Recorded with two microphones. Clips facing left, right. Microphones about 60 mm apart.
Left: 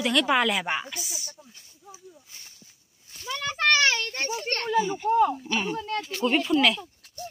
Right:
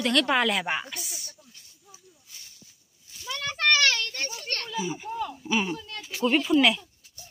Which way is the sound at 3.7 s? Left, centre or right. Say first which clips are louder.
Left 1 dB; centre.